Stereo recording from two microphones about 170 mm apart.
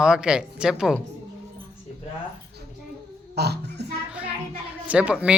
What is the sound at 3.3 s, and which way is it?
Speech, 75° right (ahead or behind).